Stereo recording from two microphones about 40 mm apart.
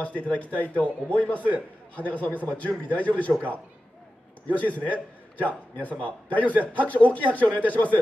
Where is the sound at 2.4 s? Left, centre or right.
Left.